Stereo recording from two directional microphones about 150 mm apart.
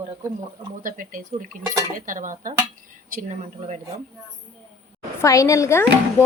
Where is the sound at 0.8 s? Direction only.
60° right (ahead or behind).